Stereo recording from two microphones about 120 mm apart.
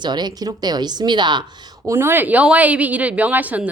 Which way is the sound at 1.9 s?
20° right (ahead or behind).